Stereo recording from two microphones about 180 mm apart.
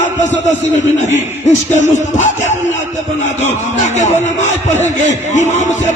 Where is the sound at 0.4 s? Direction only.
40° left (ahead or behind).